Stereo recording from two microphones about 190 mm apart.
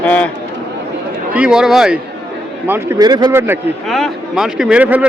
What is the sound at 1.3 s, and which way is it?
Speech, 5° right (ahead or behind).